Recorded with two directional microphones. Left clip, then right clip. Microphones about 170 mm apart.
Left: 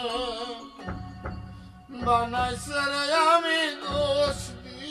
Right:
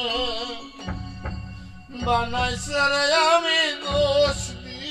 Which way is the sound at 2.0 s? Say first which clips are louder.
Right 1 dB; 20° left (ahead or behind).